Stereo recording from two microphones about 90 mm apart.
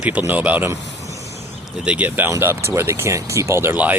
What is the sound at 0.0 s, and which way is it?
Speech, 15° right (ahead or behind).